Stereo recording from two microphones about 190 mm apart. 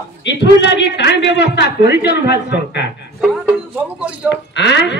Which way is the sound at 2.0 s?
60° left (ahead or behind).